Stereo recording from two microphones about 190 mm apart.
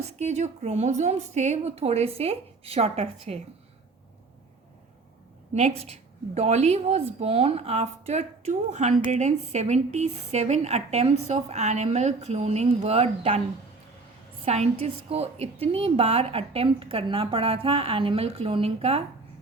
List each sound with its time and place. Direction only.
0.0 s a woman's voice: 35° right (ahead or behind)
5.5 s a woman's voice: 35° right (ahead or behind)
14.4 s a woman's voice: 35° right (ahead or behind)